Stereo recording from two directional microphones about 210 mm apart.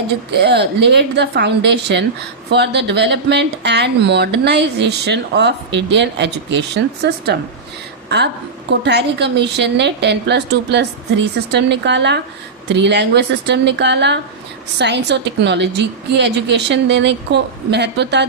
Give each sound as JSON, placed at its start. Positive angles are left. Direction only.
{"t": 0.3, "sound": "a woman's voice", "side_deg": -50}
{"t": 8.7, "sound": "a woman's voice", "side_deg": -55}